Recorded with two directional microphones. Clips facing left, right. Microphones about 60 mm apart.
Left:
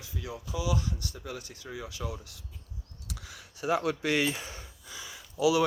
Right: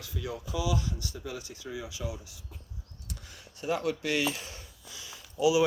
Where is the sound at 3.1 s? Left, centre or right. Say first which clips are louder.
Left 2 dB; left.